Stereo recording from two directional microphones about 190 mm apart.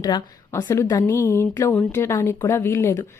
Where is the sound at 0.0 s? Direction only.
15° left (ahead or behind).